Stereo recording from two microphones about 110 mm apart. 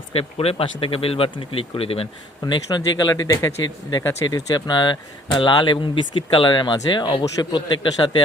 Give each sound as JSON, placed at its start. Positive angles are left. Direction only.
{"t": 0.1, "sound": "speech", "side_deg": 65}
{"t": 2.5, "sound": "speech", "side_deg": 40}